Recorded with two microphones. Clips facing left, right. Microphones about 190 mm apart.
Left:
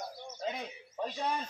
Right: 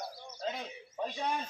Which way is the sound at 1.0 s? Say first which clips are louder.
Even; 5° right (ahead or behind).